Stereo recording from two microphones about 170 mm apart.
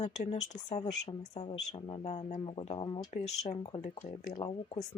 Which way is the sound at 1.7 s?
30° left (ahead or behind).